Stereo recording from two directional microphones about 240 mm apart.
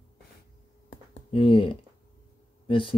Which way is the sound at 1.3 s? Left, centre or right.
Left.